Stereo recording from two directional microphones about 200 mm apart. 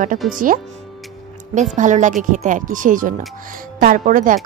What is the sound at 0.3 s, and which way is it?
A woman's voice, 45° right (ahead or behind).